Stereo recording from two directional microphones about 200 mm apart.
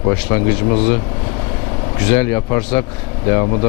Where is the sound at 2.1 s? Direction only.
10° left (ahead or behind).